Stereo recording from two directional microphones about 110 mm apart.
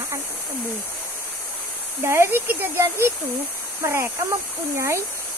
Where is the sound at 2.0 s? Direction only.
20° right (ahead or behind).